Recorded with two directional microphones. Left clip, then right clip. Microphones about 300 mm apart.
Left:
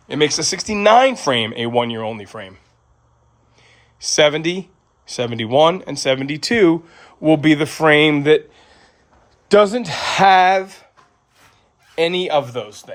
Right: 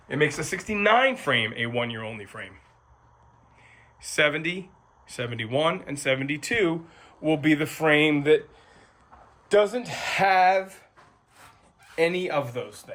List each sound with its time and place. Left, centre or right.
0.1 s speech: centre
3.6 s a sound: centre
5.0 s speech: centre
9.5 s speech: left
9.8 s speech: left
10.4 s speech: left
12.1 s speech: left